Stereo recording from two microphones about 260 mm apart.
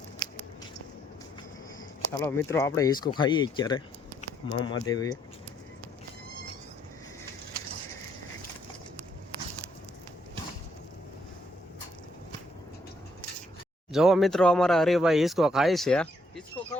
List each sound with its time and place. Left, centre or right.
2.1 s speech: centre
13.9 s speech: centre